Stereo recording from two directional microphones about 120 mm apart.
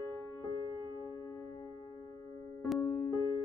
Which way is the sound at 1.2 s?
30° left (ahead or behind).